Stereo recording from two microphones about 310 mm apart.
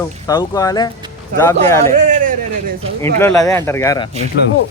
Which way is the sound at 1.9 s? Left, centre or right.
Right.